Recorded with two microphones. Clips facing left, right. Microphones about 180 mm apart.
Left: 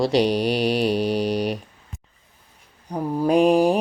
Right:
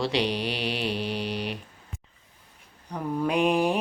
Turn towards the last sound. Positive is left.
turn(degrees=40)  # may be behind; listen again after turning